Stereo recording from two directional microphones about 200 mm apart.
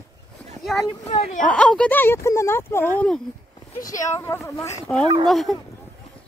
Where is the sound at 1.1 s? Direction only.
30° left (ahead or behind).